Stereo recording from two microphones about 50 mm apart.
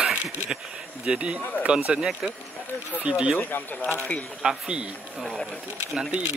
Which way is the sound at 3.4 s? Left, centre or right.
Left.